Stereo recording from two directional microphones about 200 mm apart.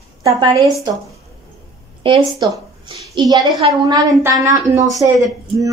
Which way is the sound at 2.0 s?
25° right (ahead or behind).